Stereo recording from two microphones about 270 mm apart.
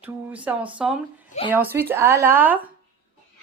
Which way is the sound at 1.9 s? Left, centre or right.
Centre.